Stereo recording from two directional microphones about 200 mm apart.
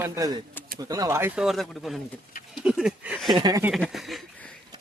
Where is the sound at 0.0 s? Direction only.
20° right (ahead or behind).